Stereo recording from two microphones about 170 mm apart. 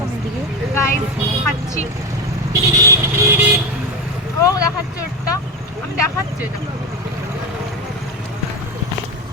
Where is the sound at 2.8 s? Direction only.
15° right (ahead or behind).